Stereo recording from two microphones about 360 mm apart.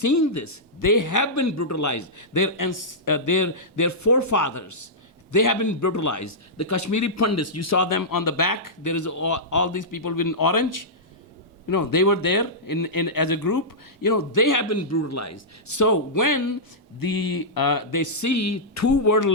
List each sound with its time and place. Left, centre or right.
0.0 s a man's voice: left
17.0 s a man's voice: left